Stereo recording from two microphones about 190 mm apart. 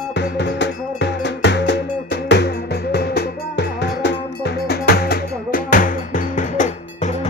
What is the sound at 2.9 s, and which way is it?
Cowbell, 60° left (ahead or behind).